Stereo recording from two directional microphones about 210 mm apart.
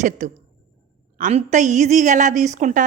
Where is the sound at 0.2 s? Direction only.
35° right (ahead or behind).